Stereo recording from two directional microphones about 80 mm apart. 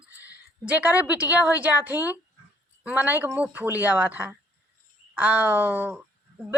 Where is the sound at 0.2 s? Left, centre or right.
Centre.